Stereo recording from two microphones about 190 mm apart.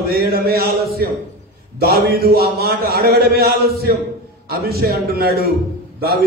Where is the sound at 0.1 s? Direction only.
55° right (ahead or behind).